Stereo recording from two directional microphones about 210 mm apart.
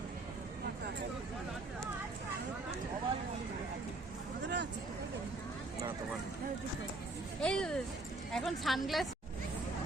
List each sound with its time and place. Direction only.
4.4 s speech: 55° right (ahead or behind)
7.4 s a woman's voice: 5° left (ahead or behind)